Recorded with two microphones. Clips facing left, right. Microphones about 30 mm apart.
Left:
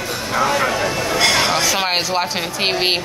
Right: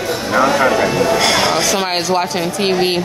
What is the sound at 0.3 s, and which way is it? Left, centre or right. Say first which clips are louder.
Speech: right 5 dB; centre.